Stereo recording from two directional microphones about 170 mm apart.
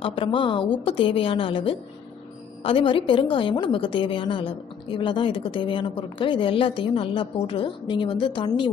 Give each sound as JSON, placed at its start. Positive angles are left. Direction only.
{"t": 0.0, "sound": "a woman's voice", "side_deg": 30}